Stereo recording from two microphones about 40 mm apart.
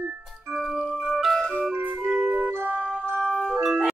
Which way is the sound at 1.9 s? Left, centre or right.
Right.